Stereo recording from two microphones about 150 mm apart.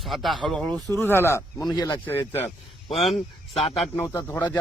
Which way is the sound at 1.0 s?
15° left (ahead or behind).